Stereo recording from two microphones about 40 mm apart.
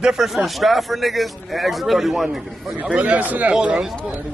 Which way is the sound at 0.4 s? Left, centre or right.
Centre.